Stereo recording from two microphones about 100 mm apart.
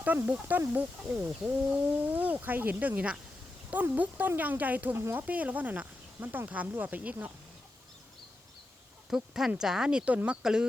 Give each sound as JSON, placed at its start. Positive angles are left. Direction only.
{"t": 0.0, "sound": "speech", "side_deg": -15}
{"t": 9.0, "sound": "speech", "side_deg": -5}